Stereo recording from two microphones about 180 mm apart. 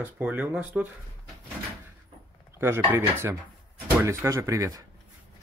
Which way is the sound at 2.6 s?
15° right (ahead or behind).